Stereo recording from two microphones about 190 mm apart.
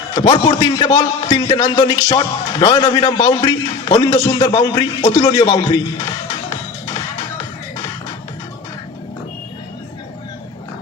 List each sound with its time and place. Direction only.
0.3 s speech: 25° left (ahead or behind)